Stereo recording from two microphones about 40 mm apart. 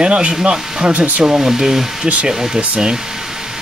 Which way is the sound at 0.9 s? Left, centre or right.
Right.